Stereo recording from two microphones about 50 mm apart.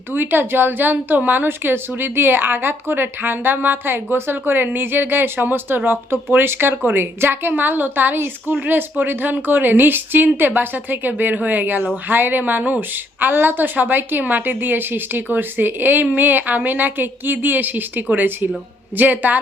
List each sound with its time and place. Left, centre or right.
0.1 s a woman's voice: right
7.5 s a woman's voice: right